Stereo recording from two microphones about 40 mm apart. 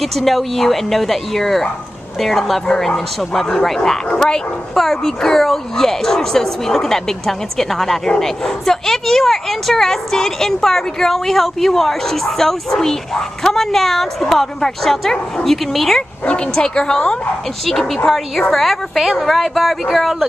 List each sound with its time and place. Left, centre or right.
0.0 s speech: centre
16.3 s a woman's voice: left
17.6 s speech: centre